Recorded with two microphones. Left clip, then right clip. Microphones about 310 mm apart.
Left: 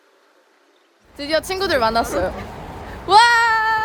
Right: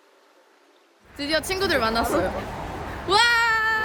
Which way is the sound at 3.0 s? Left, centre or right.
Centre.